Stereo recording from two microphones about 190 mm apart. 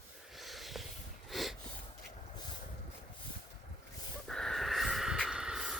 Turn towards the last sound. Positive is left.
turn(degrees=-5)  # may be behind; listen again after turning